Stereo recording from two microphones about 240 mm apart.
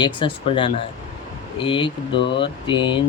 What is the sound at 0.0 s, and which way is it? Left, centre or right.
Speech, left.